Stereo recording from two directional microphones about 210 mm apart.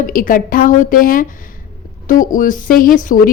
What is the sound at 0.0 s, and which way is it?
A woman's voice, 40° left (ahead or behind).